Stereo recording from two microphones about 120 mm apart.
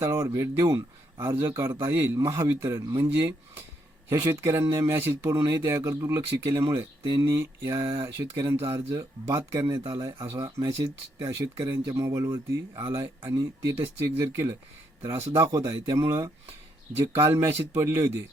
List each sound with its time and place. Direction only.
0.0 s speech: 20° right (ahead or behind)
9.6 s speech: 35° right (ahead or behind)
15.4 s speech: 30° right (ahead or behind)